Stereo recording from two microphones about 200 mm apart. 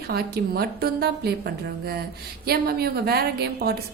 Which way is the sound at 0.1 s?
50° right (ahead or behind).